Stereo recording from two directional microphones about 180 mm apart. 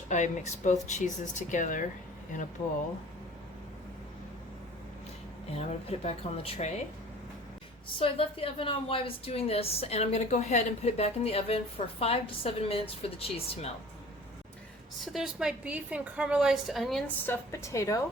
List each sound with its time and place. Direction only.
0.1 s speech: 40° left (ahead or behind)
5.5 s a woman's voice: 35° left (ahead or behind)
7.9 s a woman's voice: 30° left (ahead or behind)
15.0 s a woman's voice: centre (ahead or behind)
17.2 s a woman's voice: 15° left (ahead or behind)